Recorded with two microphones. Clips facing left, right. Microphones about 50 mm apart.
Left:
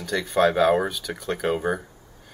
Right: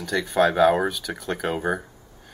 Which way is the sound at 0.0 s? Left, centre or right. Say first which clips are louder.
Even; centre.